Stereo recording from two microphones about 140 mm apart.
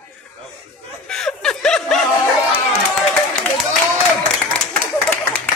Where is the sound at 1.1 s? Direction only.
5° left (ahead or behind).